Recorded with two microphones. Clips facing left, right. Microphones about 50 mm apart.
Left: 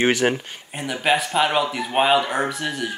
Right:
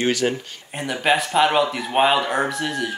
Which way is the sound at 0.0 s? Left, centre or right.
Left.